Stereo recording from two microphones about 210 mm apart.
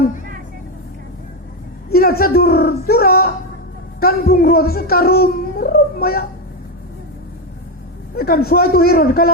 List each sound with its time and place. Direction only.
1.9 s a woman's voice: 45° left (ahead or behind)
8.1 s a man's voice: 45° left (ahead or behind)